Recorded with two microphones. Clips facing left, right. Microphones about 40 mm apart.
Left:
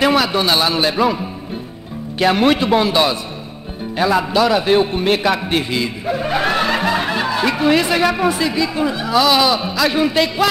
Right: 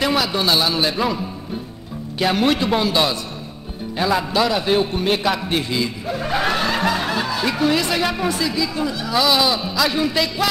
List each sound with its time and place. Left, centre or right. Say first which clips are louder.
0.0 s speech: left 4 dB; centre
9.1 s speech: left 3 dB; centre